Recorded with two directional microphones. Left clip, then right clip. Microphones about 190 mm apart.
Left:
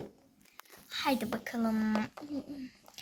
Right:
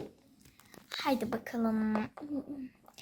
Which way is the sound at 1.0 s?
15° right (ahead or behind).